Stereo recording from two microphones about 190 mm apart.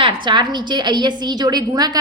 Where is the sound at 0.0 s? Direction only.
25° right (ahead or behind).